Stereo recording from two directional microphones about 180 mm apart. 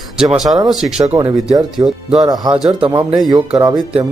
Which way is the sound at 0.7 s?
Centre (ahead or behind).